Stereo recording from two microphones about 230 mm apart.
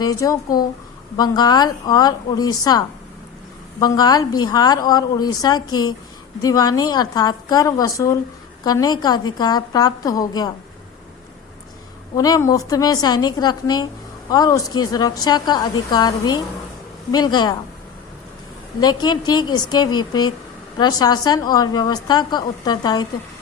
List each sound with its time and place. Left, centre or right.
0.0 s a woman's voice: centre
12.1 s a woman's voice: centre
18.8 s a woman's voice: centre